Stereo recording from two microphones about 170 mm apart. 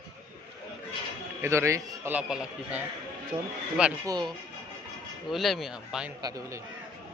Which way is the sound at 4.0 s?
25° right (ahead or behind).